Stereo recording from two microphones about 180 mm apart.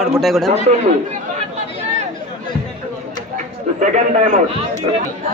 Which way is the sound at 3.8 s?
45° right (ahead or behind).